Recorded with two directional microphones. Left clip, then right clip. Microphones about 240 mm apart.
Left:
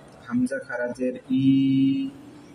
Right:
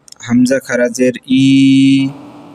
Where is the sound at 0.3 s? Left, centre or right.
Right.